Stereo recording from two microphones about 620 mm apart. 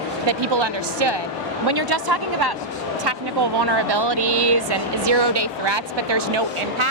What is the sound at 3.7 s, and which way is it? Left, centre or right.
Speech, right.